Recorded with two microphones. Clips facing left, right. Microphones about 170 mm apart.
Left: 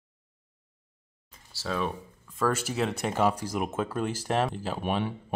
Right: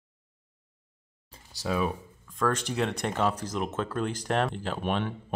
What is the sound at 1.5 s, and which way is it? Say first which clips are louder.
Speech: right 2 dB; 10° right (ahead or behind).